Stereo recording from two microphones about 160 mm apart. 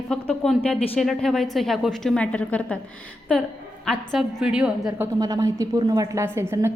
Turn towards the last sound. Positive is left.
turn(degrees=-15)  # may be behind; listen again after turning